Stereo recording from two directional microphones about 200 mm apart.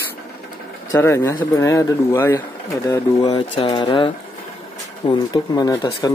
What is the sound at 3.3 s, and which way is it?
Speech, 30° left (ahead or behind).